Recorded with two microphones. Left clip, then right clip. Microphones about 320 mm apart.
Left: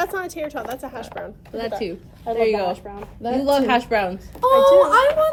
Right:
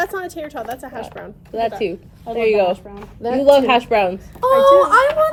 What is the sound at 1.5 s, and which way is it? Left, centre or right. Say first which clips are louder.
Speech: right 6 dB; centre.